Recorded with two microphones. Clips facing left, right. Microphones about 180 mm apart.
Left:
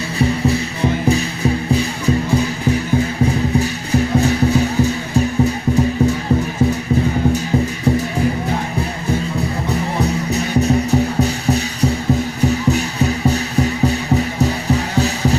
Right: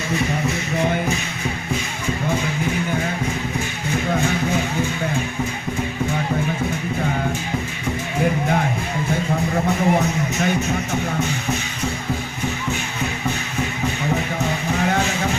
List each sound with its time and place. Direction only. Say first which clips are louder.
0.2 s music: left 11 dB; 35° left (ahead or behind)
3.6 s music: left 6 dB; 35° left (ahead or behind)
10.0 s music: left 3 dB; 35° left (ahead or behind)